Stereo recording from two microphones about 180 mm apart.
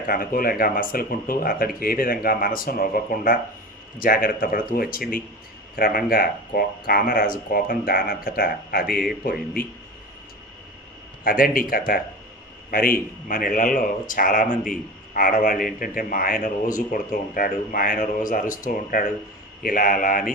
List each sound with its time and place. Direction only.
0.1 s speech: 55° left (ahead or behind)
11.2 s speech: 55° left (ahead or behind)
13.2 s speech: 50° left (ahead or behind)